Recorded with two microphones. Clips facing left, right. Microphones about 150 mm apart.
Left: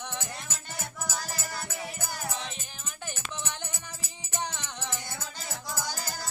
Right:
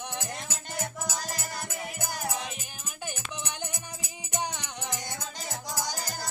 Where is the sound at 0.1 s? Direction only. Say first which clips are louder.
Right 2 dB; 15° right (ahead or behind).